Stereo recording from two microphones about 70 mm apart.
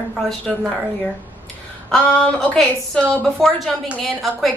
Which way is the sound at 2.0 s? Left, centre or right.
Centre.